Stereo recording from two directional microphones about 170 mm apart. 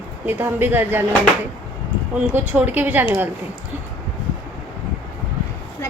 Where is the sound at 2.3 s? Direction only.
10° right (ahead or behind).